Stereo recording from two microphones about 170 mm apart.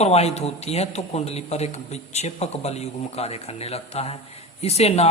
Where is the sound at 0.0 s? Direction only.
40° left (ahead or behind).